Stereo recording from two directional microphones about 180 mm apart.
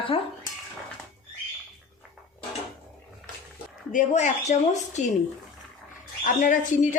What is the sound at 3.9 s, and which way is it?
A woman's voice, 40° left (ahead or behind).